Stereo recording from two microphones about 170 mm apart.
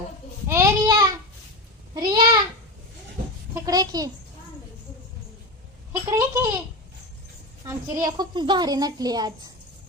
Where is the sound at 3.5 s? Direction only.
20° right (ahead or behind).